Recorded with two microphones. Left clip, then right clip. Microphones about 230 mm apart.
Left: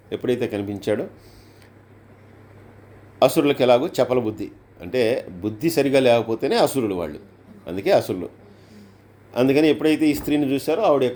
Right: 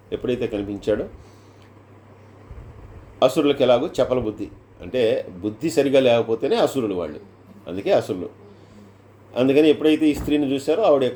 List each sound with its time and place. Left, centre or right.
0.1 s a man's voice: left
3.2 s a man's voice: left
9.3 s a man's voice: left